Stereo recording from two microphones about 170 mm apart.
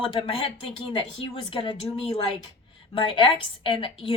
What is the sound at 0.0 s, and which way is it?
A woman's voice, 30° left (ahead or behind).